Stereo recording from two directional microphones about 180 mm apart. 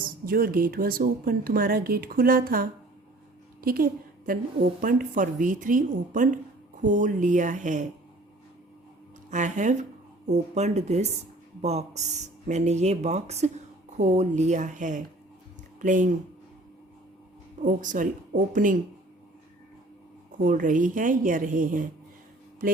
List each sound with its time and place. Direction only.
0.0 s a woman's voice: 55° right (ahead or behind)
9.3 s speech: 45° right (ahead or behind)
17.6 s speech: 45° right (ahead or behind)
20.4 s speech: 45° right (ahead or behind)